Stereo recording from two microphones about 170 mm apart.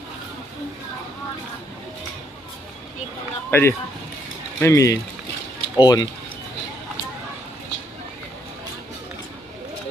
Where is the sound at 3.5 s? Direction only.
15° left (ahead or behind).